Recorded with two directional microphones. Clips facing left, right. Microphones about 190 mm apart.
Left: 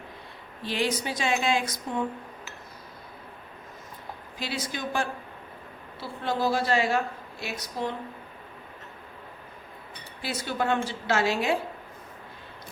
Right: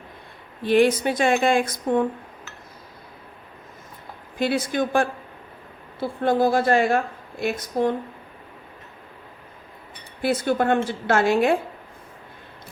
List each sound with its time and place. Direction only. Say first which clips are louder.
0.6 s a woman's voice: right 11 dB; 55° right (ahead or behind)
4.4 s a woman's voice: right 11 dB; 55° right (ahead or behind)
10.2 s a woman's voice: right 9 dB; 55° right (ahead or behind)